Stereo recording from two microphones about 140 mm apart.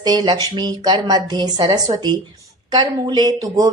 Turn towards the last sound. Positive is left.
turn(degrees=-25)  # may be behind; listen again after turning